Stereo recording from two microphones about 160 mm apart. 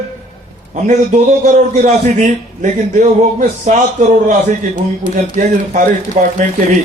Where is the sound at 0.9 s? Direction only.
50° right (ahead or behind).